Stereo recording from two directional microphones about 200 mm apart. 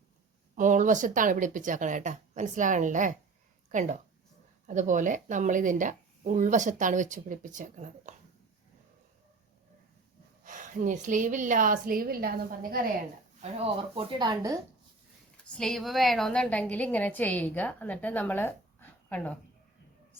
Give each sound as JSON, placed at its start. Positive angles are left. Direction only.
{"t": 0.5, "sound": "speech", "side_deg": -40}
{"t": 10.4, "sound": "speech", "side_deg": -40}
{"t": 13.9, "sound": "speech", "side_deg": -20}
{"t": 15.5, "sound": "a woman's voice", "side_deg": 0}